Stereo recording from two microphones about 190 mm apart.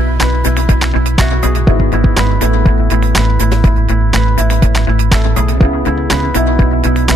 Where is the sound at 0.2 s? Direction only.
Centre (ahead or behind).